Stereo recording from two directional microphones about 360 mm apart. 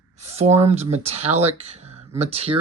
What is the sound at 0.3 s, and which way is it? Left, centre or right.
Speech, centre.